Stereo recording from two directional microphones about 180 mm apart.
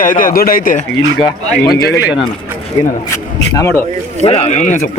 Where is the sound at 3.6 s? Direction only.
15° left (ahead or behind).